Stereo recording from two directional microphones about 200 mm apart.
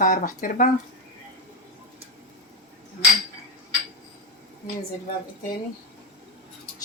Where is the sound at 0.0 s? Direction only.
45° left (ahead or behind).